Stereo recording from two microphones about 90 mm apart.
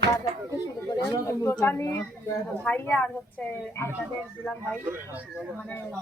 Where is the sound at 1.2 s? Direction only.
30° left (ahead or behind).